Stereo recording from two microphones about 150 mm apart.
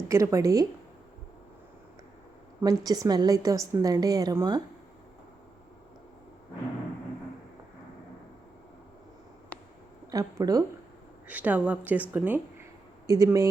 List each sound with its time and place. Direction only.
0.1 s a woman's voice: 20° right (ahead or behind)
2.6 s a woman's voice: 25° right (ahead or behind)
10.1 s a woman's voice: 25° right (ahead or behind)
11.3 s a woman's voice: 10° right (ahead or behind)